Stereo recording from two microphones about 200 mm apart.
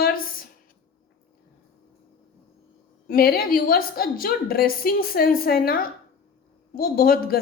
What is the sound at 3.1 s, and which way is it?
A woman's voice, 50° left (ahead or behind).